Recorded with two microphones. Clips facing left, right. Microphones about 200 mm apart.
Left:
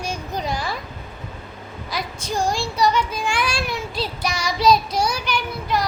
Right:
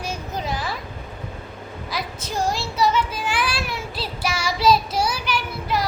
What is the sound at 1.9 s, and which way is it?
Child singing, 5° right (ahead or behind).